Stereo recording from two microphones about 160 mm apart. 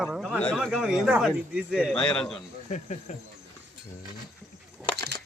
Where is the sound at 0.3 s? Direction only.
5° left (ahead or behind).